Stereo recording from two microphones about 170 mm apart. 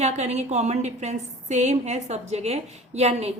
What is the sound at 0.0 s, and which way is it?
A woman's voice, 40° right (ahead or behind).